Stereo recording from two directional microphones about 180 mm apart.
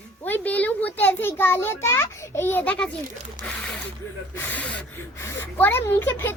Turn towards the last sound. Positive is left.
turn(degrees=10)  # may be behind; listen again after turning